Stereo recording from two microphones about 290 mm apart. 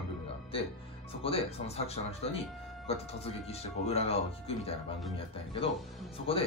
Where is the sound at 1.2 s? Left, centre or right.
Centre.